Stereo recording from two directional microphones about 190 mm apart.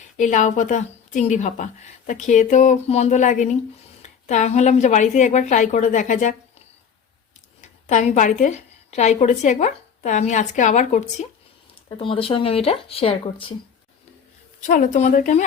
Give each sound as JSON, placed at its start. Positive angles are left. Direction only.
{"t": 0.2, "sound": "a woman's voice", "side_deg": 40}
{"t": 7.6, "sound": "a woman's voice", "side_deg": 40}
{"t": 14.7, "sound": "a woman's voice", "side_deg": 40}